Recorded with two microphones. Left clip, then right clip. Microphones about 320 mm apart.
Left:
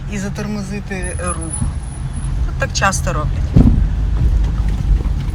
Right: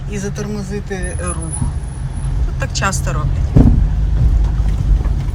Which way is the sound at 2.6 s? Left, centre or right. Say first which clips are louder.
Left 3 dB; centre.